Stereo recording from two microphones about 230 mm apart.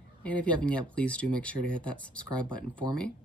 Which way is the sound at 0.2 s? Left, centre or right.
Centre.